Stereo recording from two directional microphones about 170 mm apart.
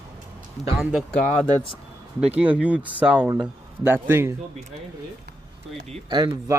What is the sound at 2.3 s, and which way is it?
Speech, 10° right (ahead or behind).